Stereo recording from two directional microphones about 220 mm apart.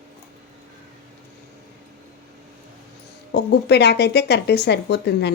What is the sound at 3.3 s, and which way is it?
Speech, 50° left (ahead or behind).